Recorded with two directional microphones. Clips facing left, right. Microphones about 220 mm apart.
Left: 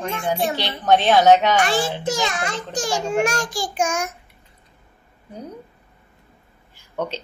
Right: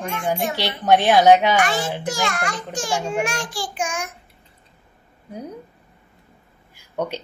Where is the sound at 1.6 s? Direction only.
30° left (ahead or behind).